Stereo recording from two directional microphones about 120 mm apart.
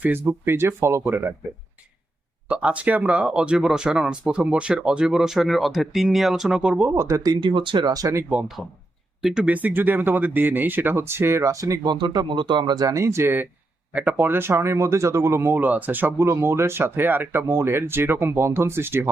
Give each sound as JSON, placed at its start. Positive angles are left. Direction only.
{"t": 0.0, "sound": "speech", "side_deg": -15}
{"t": 2.5, "sound": "speech", "side_deg": -10}
{"t": 6.9, "sound": "speech", "side_deg": -25}
{"t": 9.2, "sound": "speech", "side_deg": -5}
{"t": 11.8, "sound": "speech", "side_deg": -40}